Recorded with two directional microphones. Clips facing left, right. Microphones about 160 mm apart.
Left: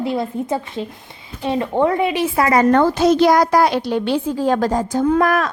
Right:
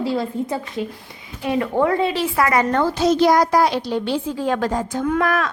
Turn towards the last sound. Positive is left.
turn(degrees=40)  # may be behind; listen again after turning